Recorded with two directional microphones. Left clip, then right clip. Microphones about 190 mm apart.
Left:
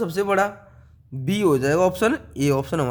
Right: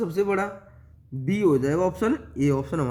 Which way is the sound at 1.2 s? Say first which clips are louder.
Left 2 dB; 65° left (ahead or behind).